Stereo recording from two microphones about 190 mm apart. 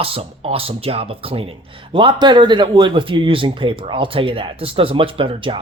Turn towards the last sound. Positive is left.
turn(degrees=-25)  # may be behind; listen again after turning